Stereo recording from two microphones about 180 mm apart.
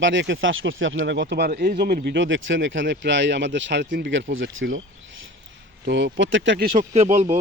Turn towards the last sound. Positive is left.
turn(degrees=-40)  # may be behind; listen again after turning